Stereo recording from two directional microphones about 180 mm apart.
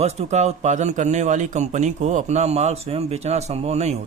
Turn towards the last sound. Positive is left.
turn(degrees=-40)  # may be behind; listen again after turning